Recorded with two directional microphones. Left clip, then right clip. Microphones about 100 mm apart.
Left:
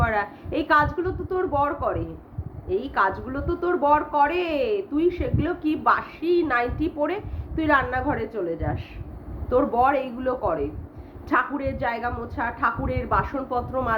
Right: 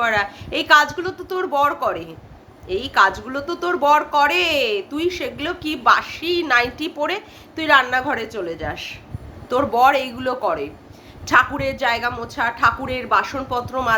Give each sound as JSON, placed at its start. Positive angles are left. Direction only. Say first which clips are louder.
{"t": 0.0, "sound": "a woman's voice", "louder": "right 5 dB", "side_deg": -15}